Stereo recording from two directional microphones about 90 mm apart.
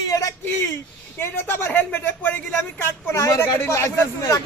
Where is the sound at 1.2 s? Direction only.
25° left (ahead or behind).